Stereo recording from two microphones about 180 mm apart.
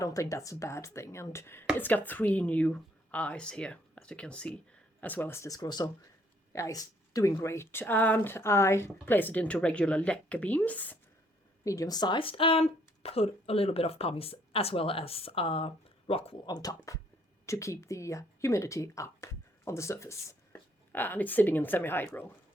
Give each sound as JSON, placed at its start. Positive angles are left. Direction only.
{"t": 0.0, "sound": "speech", "side_deg": 15}